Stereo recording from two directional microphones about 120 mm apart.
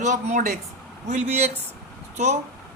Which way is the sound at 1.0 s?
75° right (ahead or behind).